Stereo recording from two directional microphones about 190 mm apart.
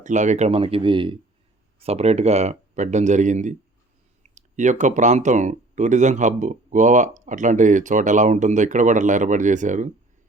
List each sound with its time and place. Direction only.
0.0 s speech: 40° right (ahead or behind)